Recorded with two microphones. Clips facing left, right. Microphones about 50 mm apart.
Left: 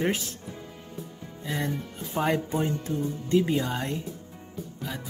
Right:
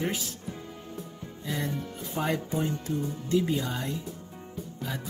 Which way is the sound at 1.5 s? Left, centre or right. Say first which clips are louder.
Left 2 dB; left.